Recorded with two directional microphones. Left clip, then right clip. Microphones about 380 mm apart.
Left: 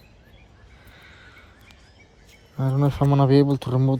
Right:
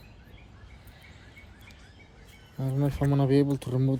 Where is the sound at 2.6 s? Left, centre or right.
Centre.